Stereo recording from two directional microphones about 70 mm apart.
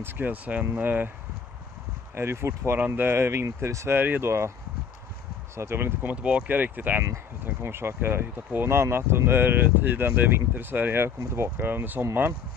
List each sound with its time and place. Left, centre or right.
0.0 s speech: right
2.1 s speech: right
5.6 s speech: right
6.0 s speech: centre